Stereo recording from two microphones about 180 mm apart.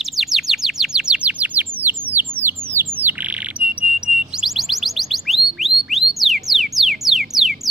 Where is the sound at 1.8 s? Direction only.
10° right (ahead or behind).